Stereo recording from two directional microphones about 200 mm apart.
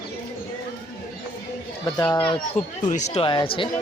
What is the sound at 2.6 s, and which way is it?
Speech, 40° left (ahead or behind).